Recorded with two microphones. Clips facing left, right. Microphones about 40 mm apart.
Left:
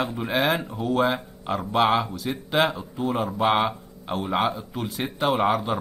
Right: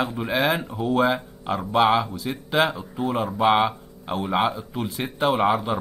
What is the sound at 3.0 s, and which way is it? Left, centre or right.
Speech, right.